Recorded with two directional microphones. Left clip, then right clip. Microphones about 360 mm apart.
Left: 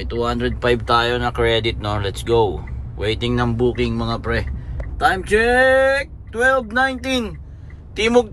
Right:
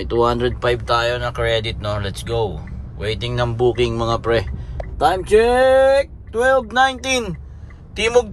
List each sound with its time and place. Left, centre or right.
0.0 s speech: centre